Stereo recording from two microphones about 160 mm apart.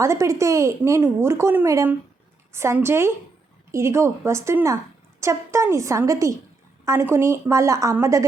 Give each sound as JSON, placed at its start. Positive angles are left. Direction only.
{"t": 0.0, "sound": "a woman's voice", "side_deg": -20}